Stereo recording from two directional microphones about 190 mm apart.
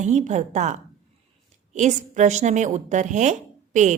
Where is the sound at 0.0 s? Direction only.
40° right (ahead or behind).